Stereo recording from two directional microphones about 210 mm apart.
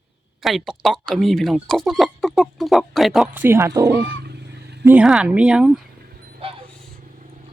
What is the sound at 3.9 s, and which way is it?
Goose, 55° right (ahead or behind).